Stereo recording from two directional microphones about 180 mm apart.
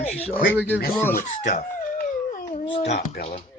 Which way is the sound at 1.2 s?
45° left (ahead or behind).